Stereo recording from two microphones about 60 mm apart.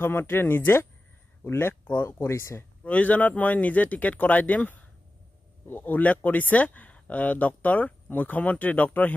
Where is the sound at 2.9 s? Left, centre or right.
Left.